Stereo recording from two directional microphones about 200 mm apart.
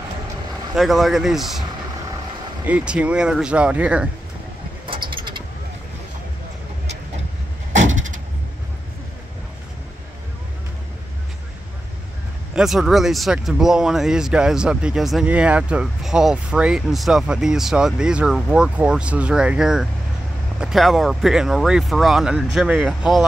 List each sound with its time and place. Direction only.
0.7 s speech: centre (ahead or behind)
2.6 s speech: 5° right (ahead or behind)
4.8 s a sound: 25° right (ahead or behind)
12.5 s speech: centre (ahead or behind)